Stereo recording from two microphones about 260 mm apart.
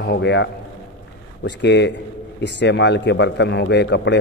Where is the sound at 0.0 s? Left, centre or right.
Left.